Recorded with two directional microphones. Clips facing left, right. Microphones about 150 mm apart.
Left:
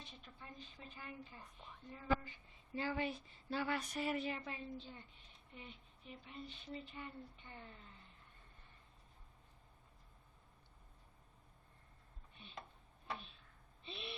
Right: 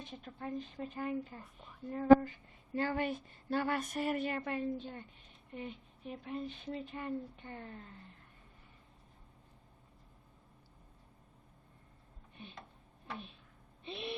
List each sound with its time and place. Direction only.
0.0 s a woman's voice: 50° right (ahead or behind)
13.8 s owl: 50° right (ahead or behind)